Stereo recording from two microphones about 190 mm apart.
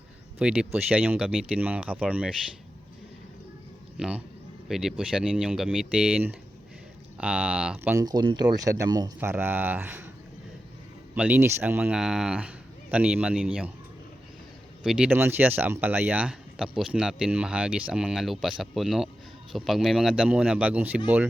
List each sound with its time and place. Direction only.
0.3 s speech: 5° right (ahead or behind)
3.9 s speech: 5° right (ahead or behind)
7.9 s speech: 20° right (ahead or behind)
11.1 s speech: 10° right (ahead or behind)
14.8 s speech: 5° right (ahead or behind)